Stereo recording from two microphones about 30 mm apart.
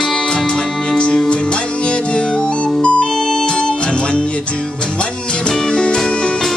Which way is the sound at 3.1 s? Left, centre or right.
Centre.